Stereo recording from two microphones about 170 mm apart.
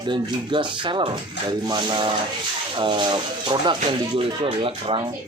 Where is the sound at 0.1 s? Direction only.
30° right (ahead or behind).